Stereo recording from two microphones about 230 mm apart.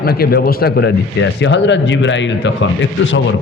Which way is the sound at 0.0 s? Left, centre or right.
Left.